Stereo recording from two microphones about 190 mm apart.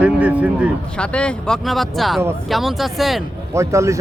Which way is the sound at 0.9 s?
5° left (ahead or behind).